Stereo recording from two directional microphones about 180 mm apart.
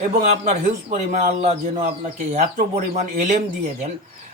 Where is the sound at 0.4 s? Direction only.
40° right (ahead or behind).